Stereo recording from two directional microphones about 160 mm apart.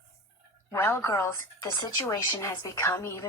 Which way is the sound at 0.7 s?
15° left (ahead or behind).